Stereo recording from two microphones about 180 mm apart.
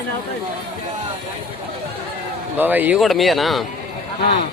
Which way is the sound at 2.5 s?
10° right (ahead or behind).